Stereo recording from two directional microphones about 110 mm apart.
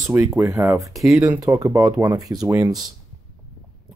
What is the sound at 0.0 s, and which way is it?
Speech, 25° right (ahead or behind).